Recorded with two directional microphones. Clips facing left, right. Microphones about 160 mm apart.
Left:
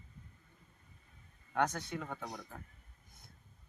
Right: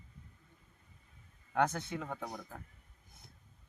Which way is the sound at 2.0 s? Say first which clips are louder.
Right 2 dB; 5° right (ahead or behind).